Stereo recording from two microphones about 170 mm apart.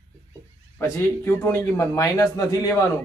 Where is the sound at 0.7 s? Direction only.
15° left (ahead or behind).